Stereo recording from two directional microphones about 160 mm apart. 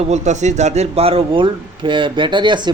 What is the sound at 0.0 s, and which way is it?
A man's voice, 45° right (ahead or behind).